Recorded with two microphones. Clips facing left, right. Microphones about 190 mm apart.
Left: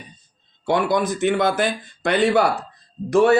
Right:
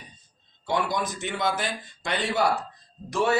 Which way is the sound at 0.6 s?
60° left (ahead or behind).